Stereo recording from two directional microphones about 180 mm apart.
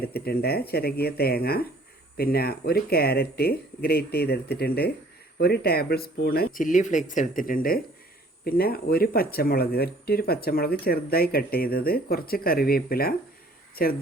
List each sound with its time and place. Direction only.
0.0 s speech: 60° left (ahead or behind)